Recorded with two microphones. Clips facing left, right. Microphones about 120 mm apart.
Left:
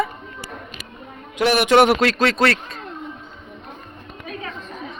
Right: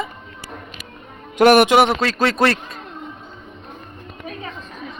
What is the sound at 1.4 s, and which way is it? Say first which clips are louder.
Speech: right 7 dB; 50° right (ahead or behind).